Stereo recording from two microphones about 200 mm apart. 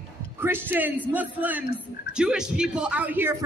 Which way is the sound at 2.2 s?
5° right (ahead or behind).